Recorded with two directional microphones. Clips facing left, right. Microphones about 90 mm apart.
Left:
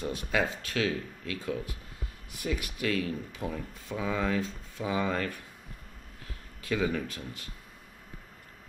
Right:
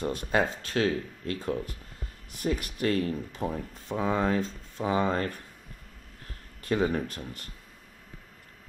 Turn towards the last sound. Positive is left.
turn(degrees=-40)  # may be behind; listen again after turning